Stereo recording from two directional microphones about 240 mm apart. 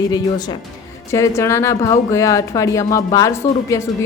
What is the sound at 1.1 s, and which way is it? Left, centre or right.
Speech, centre.